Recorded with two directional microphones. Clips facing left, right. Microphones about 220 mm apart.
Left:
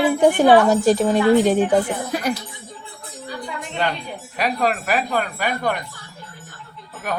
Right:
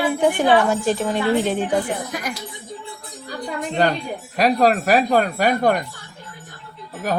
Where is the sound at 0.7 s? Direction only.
40° left (ahead or behind).